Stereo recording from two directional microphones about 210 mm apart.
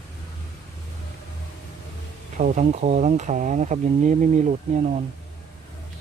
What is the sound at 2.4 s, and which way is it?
Speech, 35° right (ahead or behind).